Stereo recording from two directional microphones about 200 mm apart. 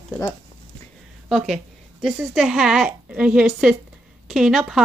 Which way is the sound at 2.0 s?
Centre (ahead or behind).